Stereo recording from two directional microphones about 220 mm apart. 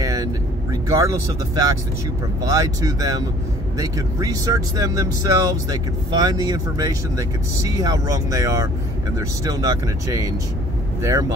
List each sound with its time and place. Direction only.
0.0 s vehicle: 15° right (ahead or behind)
2.4 s speech: 15° right (ahead or behind)